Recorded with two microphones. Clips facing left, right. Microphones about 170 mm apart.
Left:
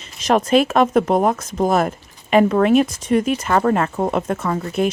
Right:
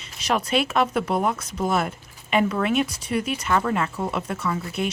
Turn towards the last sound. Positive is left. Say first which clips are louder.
# left 6 dB
turn(degrees=45)  # may be behind; listen again after turning